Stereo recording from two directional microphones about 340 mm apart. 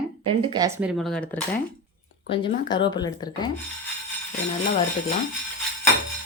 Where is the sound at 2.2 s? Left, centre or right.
Centre.